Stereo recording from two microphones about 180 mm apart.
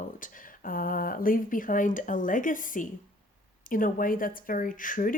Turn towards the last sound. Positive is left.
turn(degrees=50)  # may be behind; listen again after turning